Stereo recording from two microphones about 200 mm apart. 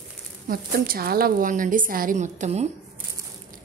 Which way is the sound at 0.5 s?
45° right (ahead or behind).